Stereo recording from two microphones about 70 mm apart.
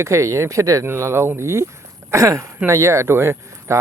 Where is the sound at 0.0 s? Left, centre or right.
Right.